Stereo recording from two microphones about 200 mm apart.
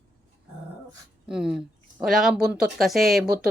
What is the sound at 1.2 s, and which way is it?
Speech, 5° right (ahead or behind).